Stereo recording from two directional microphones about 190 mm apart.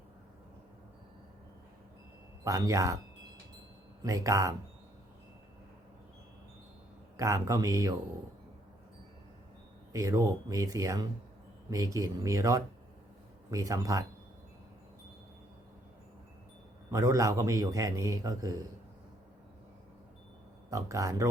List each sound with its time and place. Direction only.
2.4 s a man's voice: 15° right (ahead or behind)
4.0 s a man's voice: 15° right (ahead or behind)
7.2 s a man's voice: 15° right (ahead or behind)
9.9 s a man's voice: 15° right (ahead or behind)
16.9 s a man's voice: 15° right (ahead or behind)
20.7 s a man's voice: 15° right (ahead or behind)